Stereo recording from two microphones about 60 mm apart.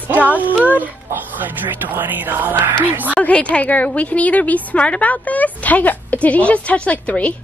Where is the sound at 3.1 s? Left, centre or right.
Left.